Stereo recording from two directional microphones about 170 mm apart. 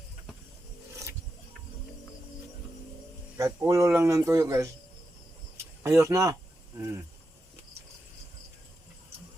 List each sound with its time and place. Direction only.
3.3 s speech: 20° right (ahead or behind)
5.8 s speech: 15° right (ahead or behind)